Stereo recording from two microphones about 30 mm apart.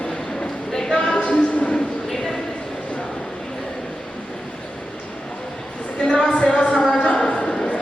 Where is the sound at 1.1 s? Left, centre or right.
Left.